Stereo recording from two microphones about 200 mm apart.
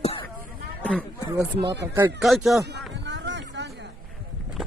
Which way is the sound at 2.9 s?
60° right (ahead or behind).